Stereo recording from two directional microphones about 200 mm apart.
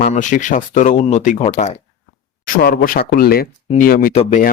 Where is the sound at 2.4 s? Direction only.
50° left (ahead or behind).